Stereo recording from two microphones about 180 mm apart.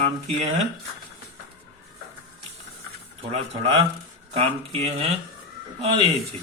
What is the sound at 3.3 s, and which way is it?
Speech, 30° right (ahead or behind).